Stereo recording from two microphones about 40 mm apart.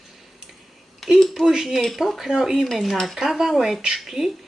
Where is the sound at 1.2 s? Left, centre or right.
Centre.